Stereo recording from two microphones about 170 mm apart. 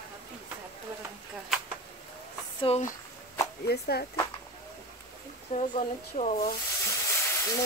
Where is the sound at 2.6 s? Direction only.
40° left (ahead or behind).